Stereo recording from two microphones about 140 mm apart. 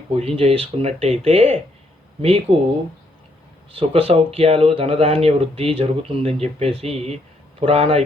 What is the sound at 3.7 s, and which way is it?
Speech, 40° right (ahead or behind).